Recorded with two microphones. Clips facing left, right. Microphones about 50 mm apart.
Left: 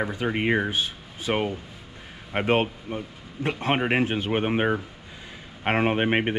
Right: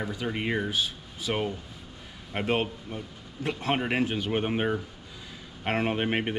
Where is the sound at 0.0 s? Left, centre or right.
Left.